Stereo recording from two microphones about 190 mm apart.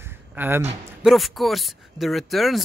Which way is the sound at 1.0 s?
Centre (ahead or behind).